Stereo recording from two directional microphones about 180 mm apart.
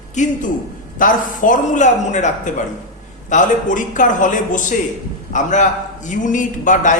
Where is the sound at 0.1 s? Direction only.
40° left (ahead or behind).